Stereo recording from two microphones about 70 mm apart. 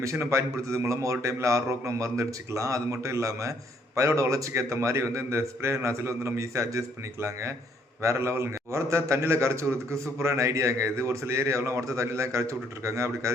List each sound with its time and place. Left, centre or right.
0.0 s a man's voice: right